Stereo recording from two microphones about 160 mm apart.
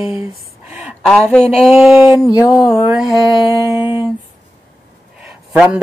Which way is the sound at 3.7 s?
15° right (ahead or behind).